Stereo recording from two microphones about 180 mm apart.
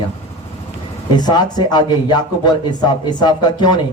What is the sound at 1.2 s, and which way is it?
Speech, 25° left (ahead or behind).